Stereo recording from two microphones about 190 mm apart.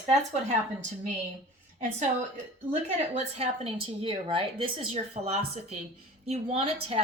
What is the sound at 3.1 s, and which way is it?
A woman's voice, 30° right (ahead or behind).